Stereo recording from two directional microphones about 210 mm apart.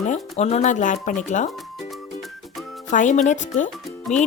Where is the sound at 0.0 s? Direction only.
35° left (ahead or behind).